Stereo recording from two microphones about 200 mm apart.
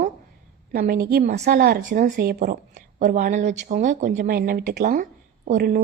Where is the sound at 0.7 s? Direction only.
45° right (ahead or behind).